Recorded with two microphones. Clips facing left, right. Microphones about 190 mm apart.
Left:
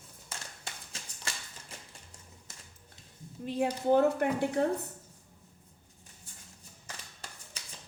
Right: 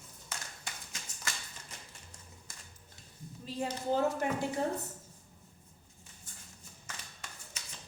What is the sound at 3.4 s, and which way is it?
Speech, 60° left (ahead or behind).